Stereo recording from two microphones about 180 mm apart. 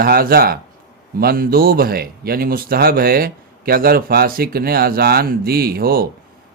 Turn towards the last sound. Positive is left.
turn(degrees=-55)  # may be behind; listen again after turning